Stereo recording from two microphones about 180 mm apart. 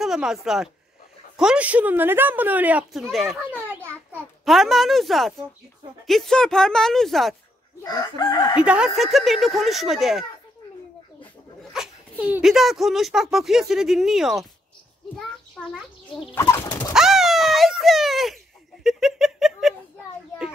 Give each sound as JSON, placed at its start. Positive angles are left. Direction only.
{"t": 0.0, "sound": "speech", "side_deg": 0}
{"t": 7.8, "sound": "chicken", "side_deg": 20}
{"t": 8.6, "sound": "speech", "side_deg": -5}
{"t": 11.7, "sound": "speech", "side_deg": -5}
{"t": 16.3, "sound": "pigeon", "side_deg": 15}
{"t": 16.9, "sound": "a sound", "side_deg": 0}